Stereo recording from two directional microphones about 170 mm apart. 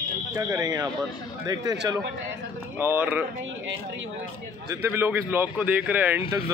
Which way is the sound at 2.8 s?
10° right (ahead or behind).